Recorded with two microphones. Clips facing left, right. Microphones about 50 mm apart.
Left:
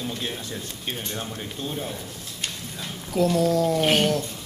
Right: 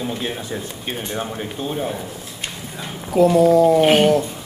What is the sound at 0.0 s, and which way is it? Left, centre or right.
Speech, centre.